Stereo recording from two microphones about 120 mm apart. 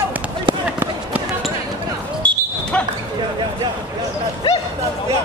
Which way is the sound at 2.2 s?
10° left (ahead or behind).